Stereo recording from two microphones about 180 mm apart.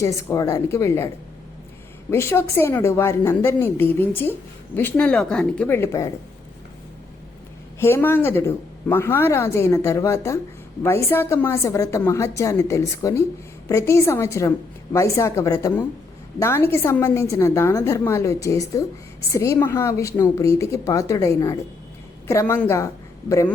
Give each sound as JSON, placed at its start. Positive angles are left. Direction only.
{"t": 0.0, "sound": "a woman's voice", "side_deg": 15}
{"t": 7.8, "sound": "a woman's voice", "side_deg": 10}